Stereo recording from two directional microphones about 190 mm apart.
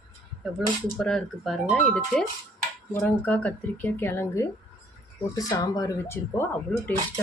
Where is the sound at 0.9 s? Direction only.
5° left (ahead or behind).